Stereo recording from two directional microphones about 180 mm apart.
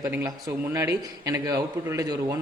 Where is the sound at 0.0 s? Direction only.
15° right (ahead or behind).